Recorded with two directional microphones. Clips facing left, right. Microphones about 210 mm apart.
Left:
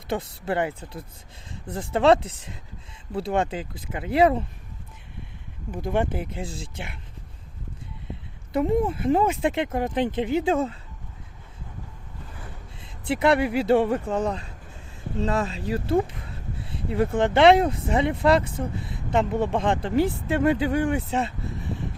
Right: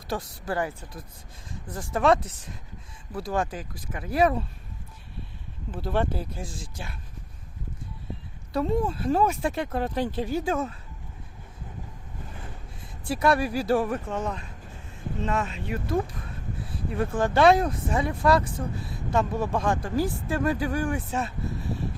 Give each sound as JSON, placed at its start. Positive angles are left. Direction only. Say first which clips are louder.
{"t": 0.1, "sound": "speech", "louder": "left 3 dB", "side_deg": 25}
{"t": 5.7, "sound": "speech", "louder": "left 2 dB", "side_deg": 15}
{"t": 8.5, "sound": "speech", "louder": "left 3 dB", "side_deg": 20}
{"t": 12.8, "sound": "speech", "louder": "left 2 dB", "side_deg": 20}